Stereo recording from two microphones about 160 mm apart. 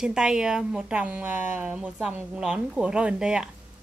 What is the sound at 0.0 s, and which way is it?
A woman's voice, 5° right (ahead or behind).